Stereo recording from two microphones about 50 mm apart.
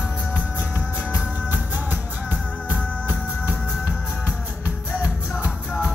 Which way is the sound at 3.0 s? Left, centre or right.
Right.